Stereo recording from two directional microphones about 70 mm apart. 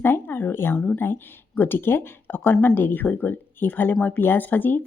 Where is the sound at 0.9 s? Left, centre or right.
Left.